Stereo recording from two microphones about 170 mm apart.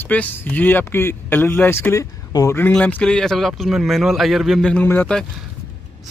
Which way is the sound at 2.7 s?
5° left (ahead or behind).